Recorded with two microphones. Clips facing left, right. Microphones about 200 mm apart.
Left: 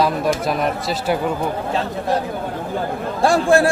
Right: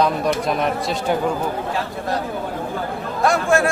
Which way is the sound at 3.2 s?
30° left (ahead or behind).